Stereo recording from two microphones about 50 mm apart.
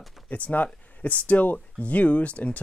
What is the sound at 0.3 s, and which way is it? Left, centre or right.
Speech, left.